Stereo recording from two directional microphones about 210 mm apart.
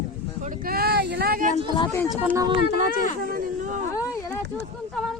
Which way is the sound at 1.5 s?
30° left (ahead or behind).